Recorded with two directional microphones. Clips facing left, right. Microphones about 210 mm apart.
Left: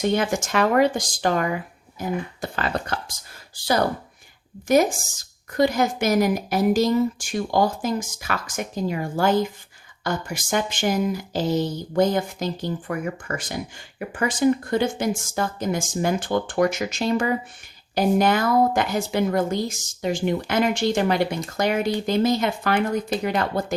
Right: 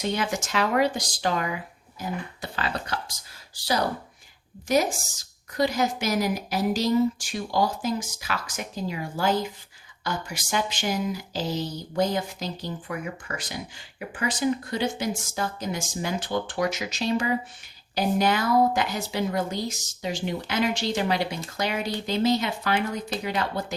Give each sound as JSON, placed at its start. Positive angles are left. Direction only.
{"t": 0.0, "sound": "speech", "side_deg": 50}